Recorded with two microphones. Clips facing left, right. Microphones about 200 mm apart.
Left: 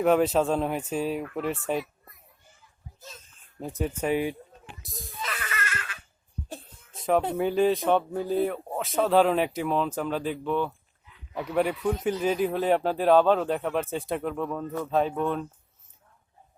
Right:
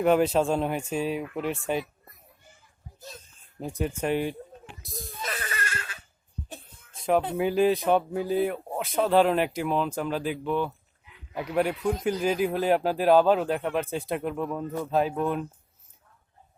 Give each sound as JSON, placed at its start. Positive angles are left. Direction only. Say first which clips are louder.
{"t": 0.0, "sound": "speech", "louder": "even", "side_deg": 0}
{"t": 3.6, "sound": "a child's voice", "louder": "even", "side_deg": 0}
{"t": 5.2, "sound": "baby laughter", "louder": "even", "side_deg": -35}
{"t": 7.0, "sound": "speech", "louder": "even", "side_deg": 0}